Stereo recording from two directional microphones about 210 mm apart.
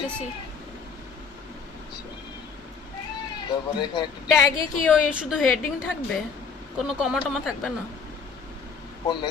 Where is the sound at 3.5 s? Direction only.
20° left (ahead or behind).